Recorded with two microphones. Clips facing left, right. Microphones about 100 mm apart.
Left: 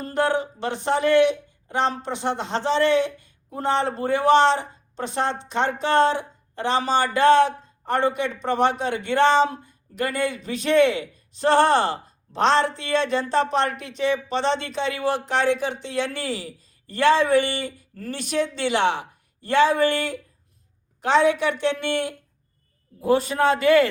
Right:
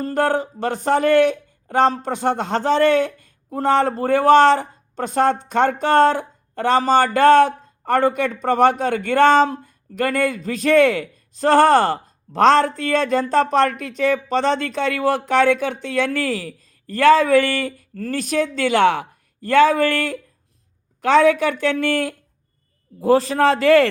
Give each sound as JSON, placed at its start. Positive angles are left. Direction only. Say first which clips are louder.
{"t": 0.0, "sound": "a man's voice", "louder": "right 3 dB", "side_deg": -45}